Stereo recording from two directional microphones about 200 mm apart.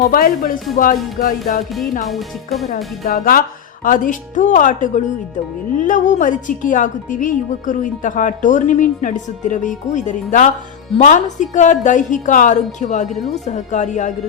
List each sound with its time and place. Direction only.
0.0 s speech: 45° left (ahead or behind)
1.7 s speech: centre (ahead or behind)
2.7 s speech: 45° left (ahead or behind)